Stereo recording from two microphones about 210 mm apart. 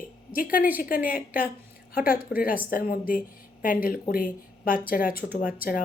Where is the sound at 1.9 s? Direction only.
45° left (ahead or behind).